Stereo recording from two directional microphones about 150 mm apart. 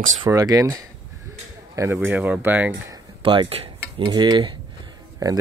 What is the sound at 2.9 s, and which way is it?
Cutlery, 30° right (ahead or behind).